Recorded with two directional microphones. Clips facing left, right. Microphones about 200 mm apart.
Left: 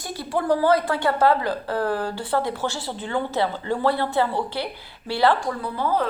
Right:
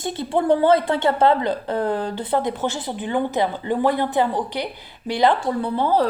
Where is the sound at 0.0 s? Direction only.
25° right (ahead or behind).